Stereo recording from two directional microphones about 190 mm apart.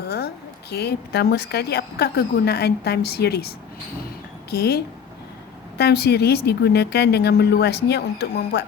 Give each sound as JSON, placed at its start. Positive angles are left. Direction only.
{"t": 0.7, "sound": "a woman's voice", "side_deg": 60}
{"t": 4.5, "sound": "a woman's voice", "side_deg": 60}